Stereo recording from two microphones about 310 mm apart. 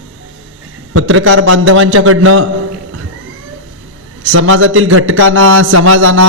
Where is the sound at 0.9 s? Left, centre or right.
Right.